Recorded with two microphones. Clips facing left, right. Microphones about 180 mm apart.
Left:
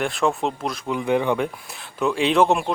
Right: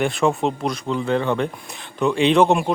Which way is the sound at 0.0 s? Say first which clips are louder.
Right 3 dB; centre (ahead or behind).